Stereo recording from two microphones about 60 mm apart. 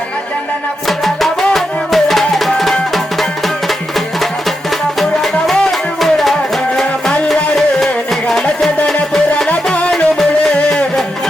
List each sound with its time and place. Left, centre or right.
0.9 s music: centre
7.5 s music: centre